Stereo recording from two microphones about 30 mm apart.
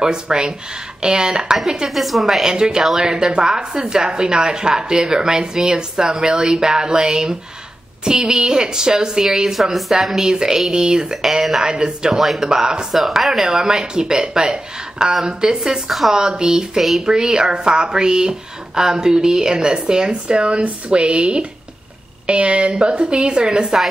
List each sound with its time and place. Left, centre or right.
0.0 s a woman's voice: right
1.9 s speech: centre
2.4 s a woman's voice: right
9.2 s speech: centre
9.9 s a woman's voice: right
12.2 s speech: centre
12.4 s a woman's voice: right
12.9 s speech: centre
13.3 s a woman's voice: centre
20.1 s a woman's voice: right